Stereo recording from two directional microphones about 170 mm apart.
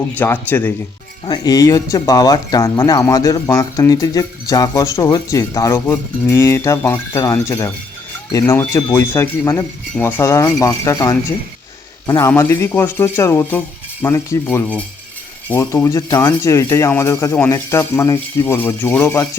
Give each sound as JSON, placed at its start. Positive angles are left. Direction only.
{"t": 0.2, "sound": "speech", "side_deg": 10}